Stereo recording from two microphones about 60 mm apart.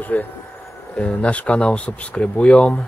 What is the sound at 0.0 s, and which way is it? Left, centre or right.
Speech, left.